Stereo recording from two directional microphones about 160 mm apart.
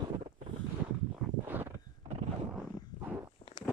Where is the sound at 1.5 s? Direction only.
10° right (ahead or behind).